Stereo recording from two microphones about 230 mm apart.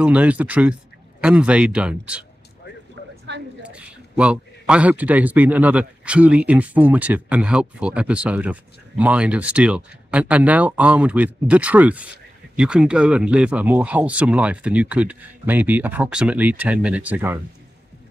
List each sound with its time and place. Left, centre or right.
0.0 s a man's voice: centre
3.3 s a sound: right
3.6 s a man's voice: centre